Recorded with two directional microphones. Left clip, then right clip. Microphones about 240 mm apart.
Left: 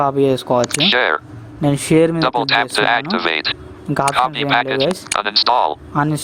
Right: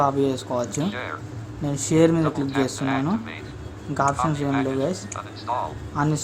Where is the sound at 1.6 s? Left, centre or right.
Left.